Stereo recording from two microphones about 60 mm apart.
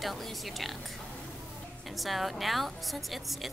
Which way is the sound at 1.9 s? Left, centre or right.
Centre.